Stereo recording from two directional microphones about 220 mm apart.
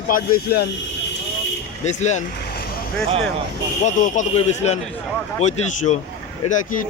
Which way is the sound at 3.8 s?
35° left (ahead or behind).